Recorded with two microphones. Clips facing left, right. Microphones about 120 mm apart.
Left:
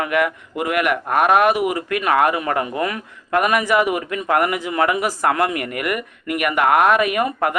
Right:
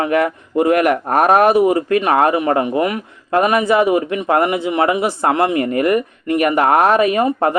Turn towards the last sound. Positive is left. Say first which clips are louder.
# right 5 dB
turn(degrees=-30)  # may be behind; listen again after turning